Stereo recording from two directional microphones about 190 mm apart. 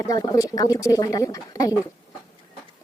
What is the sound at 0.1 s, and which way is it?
Speech, 20° left (ahead or behind).